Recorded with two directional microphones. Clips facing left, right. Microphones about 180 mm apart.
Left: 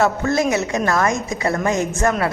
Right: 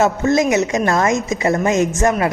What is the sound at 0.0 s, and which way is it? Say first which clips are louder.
A woman's voice: right 3 dB; 20° right (ahead or behind).